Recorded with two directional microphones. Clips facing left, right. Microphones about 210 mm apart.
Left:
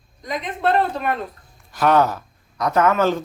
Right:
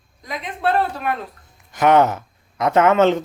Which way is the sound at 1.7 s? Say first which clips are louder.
Right 2 dB; 20° right (ahead or behind).